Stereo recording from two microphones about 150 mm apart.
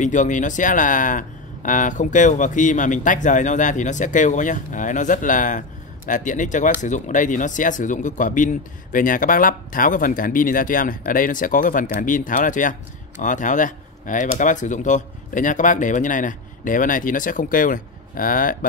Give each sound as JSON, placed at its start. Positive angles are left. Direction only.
{"t": 0.0, "sound": "speech", "side_deg": 55}